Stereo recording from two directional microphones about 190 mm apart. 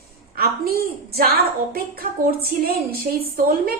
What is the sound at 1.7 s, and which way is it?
A woman's voice, 50° right (ahead or behind).